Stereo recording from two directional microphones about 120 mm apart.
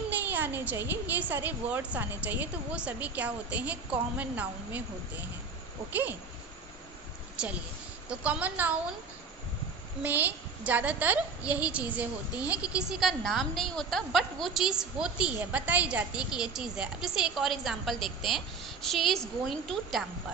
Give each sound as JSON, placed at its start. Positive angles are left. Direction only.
{"t": 0.3, "sound": "a woman's voice", "side_deg": -15}
{"t": 5.9, "sound": "a woman's voice", "side_deg": -15}
{"t": 8.1, "sound": "a woman's voice", "side_deg": -10}
{"t": 10.0, "sound": "a woman's voice", "side_deg": -15}